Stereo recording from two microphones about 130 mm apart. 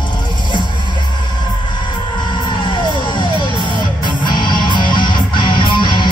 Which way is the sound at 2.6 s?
35° left (ahead or behind).